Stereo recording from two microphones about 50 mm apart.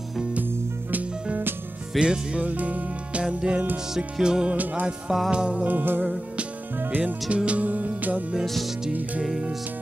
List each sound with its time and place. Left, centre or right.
2.0 s music: centre
2.4 s music: right
5.7 s music: right
7.0 s music: right